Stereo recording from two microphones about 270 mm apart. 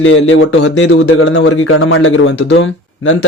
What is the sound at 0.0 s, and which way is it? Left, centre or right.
A man's voice, left.